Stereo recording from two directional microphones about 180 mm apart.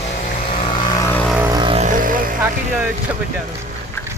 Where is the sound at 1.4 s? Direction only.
15° right (ahead or behind).